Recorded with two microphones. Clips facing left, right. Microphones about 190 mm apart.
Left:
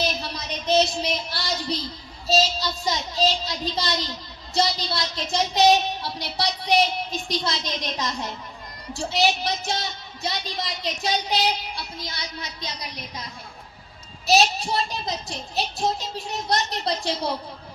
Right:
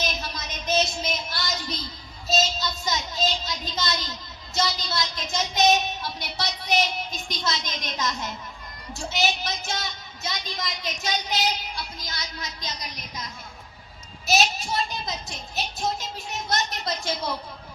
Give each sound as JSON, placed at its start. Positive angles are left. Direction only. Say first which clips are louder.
{"t": 0.0, "sound": "a sound", "louder": "left 3 dB", "side_deg": 35}
{"t": 2.2, "sound": "child singing", "louder": "left 3 dB", "side_deg": 35}
{"t": 4.5, "sound": "a woman's voice", "louder": "left 3 dB", "side_deg": 30}
{"t": 14.3, "sound": "a woman's voice", "louder": "left 4 dB", "side_deg": 35}